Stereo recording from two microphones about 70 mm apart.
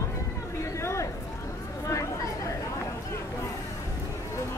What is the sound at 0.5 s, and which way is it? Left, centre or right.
Chatter, left.